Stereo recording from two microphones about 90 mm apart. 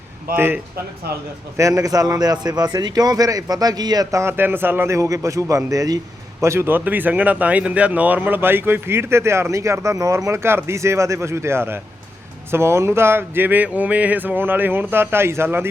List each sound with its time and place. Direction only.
0.3 s speech: 25° right (ahead or behind)
1.5 s speech: 35° right (ahead or behind)
4.2 s speech: 25° right (ahead or behind)
4.9 s a man's voice: 35° right (ahead or behind)
6.4 s speech: 30° right (ahead or behind)